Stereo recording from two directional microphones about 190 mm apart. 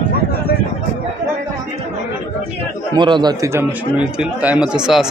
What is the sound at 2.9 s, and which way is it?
Speech, 25° right (ahead or behind).